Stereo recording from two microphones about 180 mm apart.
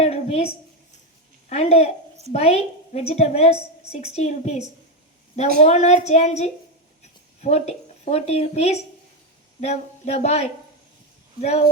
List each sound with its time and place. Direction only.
0.0 s a sound: 35° left (ahead or behind)
1.5 s a woman's voice: 35° left (ahead or behind)
5.6 s a woman's voice: 40° left (ahead or behind)